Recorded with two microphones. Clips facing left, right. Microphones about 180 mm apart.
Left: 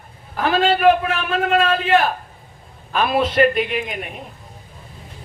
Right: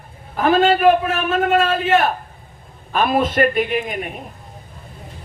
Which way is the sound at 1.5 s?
5° right (ahead or behind).